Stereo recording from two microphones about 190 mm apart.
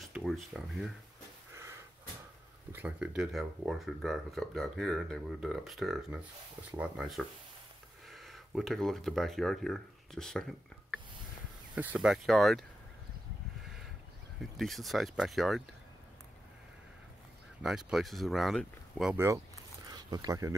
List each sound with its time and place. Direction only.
0.0 s speech: centre (ahead or behind)
1.5 s a sound: 15° right (ahead or behind)
2.7 s speech: 10° right (ahead or behind)
11.7 s speech: 10° right (ahead or behind)
13.6 s a sound: centre (ahead or behind)
14.4 s speech: centre (ahead or behind)
17.6 s speech: 5° right (ahead or behind)
19.1 s speech: 15° right (ahead or behind)